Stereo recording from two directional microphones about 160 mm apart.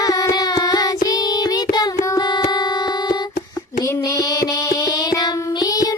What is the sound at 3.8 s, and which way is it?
Child singing, 20° left (ahead or behind).